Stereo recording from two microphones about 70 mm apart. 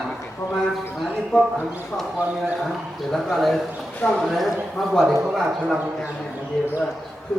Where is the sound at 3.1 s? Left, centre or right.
Centre.